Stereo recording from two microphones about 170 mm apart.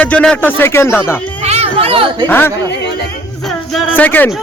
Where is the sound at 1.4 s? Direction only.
35° right (ahead or behind).